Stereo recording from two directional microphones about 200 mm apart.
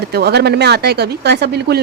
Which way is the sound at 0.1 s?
55° right (ahead or behind).